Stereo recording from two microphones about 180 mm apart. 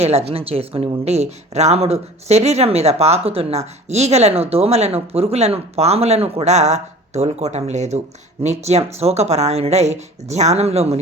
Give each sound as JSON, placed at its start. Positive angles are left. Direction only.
{"t": 0.0, "sound": "speech", "side_deg": -35}